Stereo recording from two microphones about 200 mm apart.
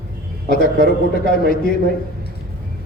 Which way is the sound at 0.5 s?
45° left (ahead or behind).